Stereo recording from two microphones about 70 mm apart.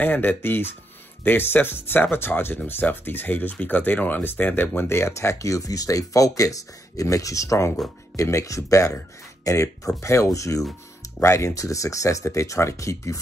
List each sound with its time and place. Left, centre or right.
0.0 s speech: left